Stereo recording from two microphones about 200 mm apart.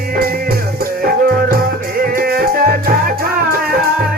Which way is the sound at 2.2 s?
50° right (ahead or behind).